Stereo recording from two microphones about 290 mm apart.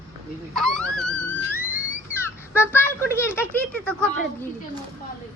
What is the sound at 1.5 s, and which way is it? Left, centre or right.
Theremin, centre.